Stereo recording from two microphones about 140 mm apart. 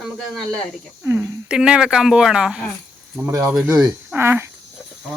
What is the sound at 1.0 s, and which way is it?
Cricket, 20° right (ahead or behind).